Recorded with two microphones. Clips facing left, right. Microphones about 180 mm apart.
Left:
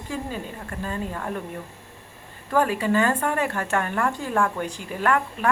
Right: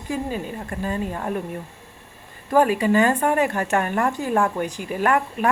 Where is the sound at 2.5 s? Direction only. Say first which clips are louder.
Right 4 dB; 15° right (ahead or behind).